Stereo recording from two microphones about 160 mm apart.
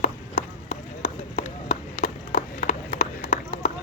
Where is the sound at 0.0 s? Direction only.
45° left (ahead or behind).